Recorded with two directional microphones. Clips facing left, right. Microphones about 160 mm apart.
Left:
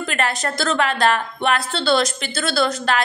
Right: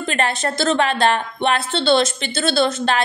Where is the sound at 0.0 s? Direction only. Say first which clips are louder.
Right 2 dB; 25° right (ahead or behind).